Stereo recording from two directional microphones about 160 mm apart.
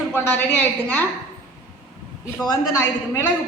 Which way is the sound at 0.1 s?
10° left (ahead or behind).